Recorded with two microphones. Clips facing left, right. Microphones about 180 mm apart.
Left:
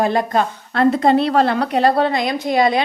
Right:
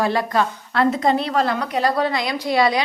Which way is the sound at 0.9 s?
60° left (ahead or behind).